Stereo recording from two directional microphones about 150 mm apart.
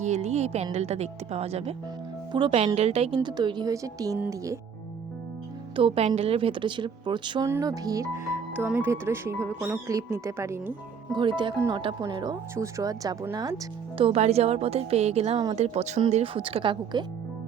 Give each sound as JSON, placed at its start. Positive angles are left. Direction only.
{"t": 0.0, "sound": "a woman's voice", "side_deg": -50}
{"t": 3.2, "sound": "speech", "side_deg": -30}
{"t": 5.7, "sound": "a woman's voice", "side_deg": -40}
{"t": 7.4, "sound": "speech", "side_deg": -20}
{"t": 11.1, "sound": "a woman's voice", "side_deg": -30}
{"t": 14.0, "sound": "a woman's voice", "side_deg": -45}